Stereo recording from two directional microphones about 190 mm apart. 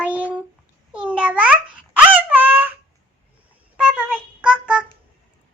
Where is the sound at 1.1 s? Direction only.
5° right (ahead or behind).